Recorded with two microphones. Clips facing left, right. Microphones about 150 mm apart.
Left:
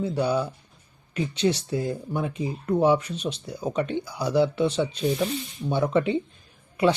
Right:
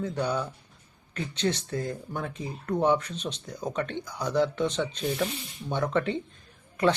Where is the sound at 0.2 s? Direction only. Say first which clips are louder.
Left 5 dB; 10° left (ahead or behind).